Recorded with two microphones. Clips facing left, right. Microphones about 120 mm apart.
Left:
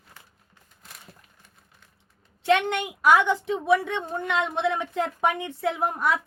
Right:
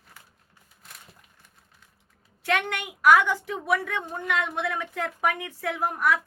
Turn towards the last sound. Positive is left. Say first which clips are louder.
# left 1 dB
turn(degrees=25)  # may be behind; listen again after turning